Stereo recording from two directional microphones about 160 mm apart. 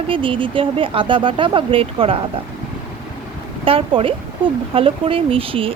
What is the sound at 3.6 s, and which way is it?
Speech, 35° right (ahead or behind).